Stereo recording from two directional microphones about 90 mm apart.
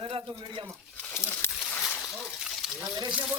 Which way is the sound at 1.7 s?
20° left (ahead or behind).